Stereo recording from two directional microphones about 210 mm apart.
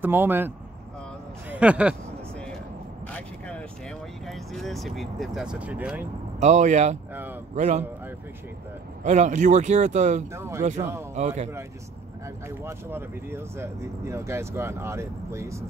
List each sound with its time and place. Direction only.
0.0 s speech: 10° right (ahead or behind)
1.5 s speech: 5° right (ahead or behind)
3.1 s vehicle: 5° left (ahead or behind)
4.3 s speech: centre (ahead or behind)
6.4 s speech: 35° right (ahead or behind)
9.0 s speech: 35° right (ahead or behind)
10.3 s speech: 15° right (ahead or behind)
11.1 s speech: 35° right (ahead or behind)
12.4 s speech: 10° right (ahead or behind)